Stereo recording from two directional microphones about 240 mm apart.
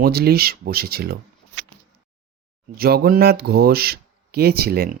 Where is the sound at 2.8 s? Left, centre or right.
Right.